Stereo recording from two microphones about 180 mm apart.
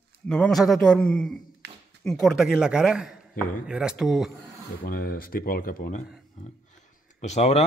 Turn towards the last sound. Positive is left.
turn(degrees=35)  # may be behind; listen again after turning